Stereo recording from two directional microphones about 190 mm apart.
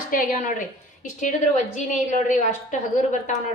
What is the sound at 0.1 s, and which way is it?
Speech, 45° left (ahead or behind).